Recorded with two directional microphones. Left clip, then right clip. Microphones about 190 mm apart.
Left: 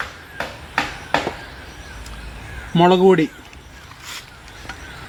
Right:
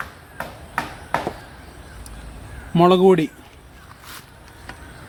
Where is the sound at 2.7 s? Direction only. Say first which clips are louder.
Left 1 dB; 15° right (ahead or behind).